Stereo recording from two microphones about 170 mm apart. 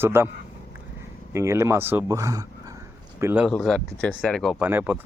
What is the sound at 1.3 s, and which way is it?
Speech, 15° right (ahead or behind).